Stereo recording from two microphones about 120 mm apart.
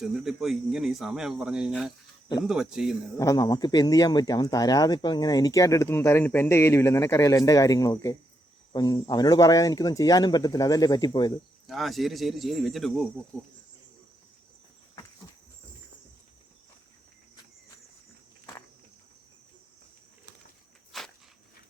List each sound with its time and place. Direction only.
0.0 s speech: 5° right (ahead or behind)
3.2 s speech: 30° left (ahead or behind)
11.6 s speech: centre (ahead or behind)
13.3 s insect: 10° left (ahead or behind)
20.9 s walk: centre (ahead or behind)